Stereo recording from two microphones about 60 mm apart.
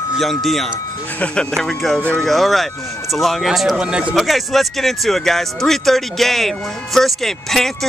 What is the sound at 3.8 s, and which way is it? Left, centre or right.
Speech, centre.